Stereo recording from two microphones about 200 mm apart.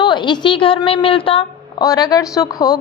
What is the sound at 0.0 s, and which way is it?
A woman's voice, 20° left (ahead or behind).